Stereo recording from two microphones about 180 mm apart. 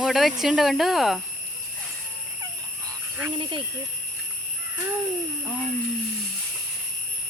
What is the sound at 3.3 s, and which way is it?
Speech, 25° right (ahead or behind).